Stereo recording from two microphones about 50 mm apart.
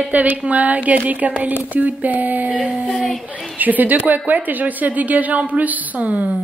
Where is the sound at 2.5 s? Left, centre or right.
Right.